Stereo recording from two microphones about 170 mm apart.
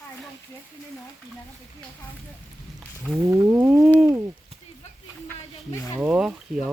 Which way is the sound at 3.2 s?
15° right (ahead or behind).